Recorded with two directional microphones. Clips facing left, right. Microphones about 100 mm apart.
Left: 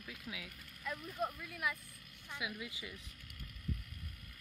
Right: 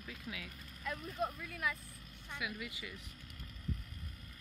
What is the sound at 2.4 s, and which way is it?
Speech, 20° left (ahead or behind).